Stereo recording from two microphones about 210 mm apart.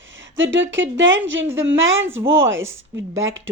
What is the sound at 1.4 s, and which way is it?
Speech, 10° right (ahead or behind).